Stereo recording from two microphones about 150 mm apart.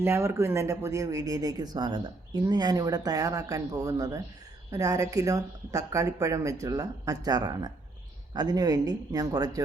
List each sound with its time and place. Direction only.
0.0 s speech: 15° right (ahead or behind)